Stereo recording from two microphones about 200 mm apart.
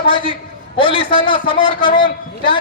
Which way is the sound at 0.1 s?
25° left (ahead or behind).